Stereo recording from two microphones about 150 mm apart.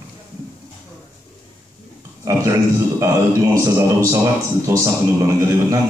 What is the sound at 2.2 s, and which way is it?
A man's voice, 20° right (ahead or behind).